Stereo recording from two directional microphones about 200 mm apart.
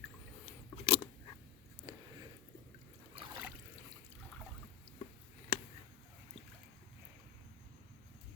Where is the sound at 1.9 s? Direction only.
15° right (ahead or behind).